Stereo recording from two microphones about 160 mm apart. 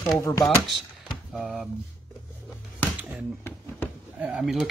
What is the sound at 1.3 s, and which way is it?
Speech, centre (ahead or behind).